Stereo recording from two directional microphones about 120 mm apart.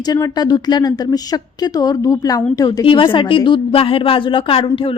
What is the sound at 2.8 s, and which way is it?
A woman's voice, 45° left (ahead or behind).